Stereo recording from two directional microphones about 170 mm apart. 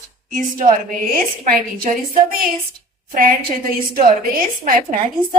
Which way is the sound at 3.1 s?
55° right (ahead or behind).